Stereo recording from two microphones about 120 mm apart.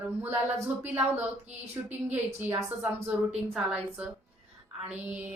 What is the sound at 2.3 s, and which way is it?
Speech, 15° right (ahead or behind).